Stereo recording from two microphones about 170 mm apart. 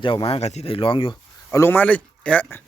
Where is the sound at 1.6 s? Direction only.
10° left (ahead or behind).